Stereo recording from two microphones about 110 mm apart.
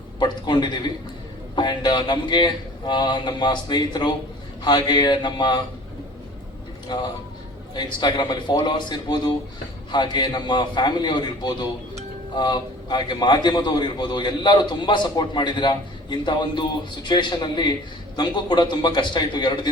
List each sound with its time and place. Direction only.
0.2 s a man's voice: 40° left (ahead or behind)
6.9 s a man's voice: 45° left (ahead or behind)